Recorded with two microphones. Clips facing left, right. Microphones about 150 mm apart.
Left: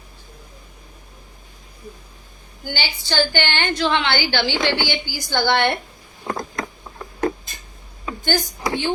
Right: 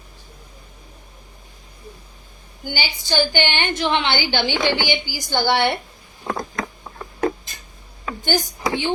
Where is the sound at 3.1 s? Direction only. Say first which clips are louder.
Right 1 dB; 15° right (ahead or behind).